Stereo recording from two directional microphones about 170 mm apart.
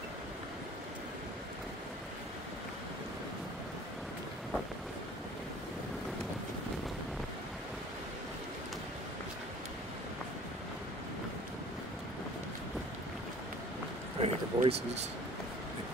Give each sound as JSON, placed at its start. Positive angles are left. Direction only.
{"t": 14.2, "sound": "speech", "side_deg": -35}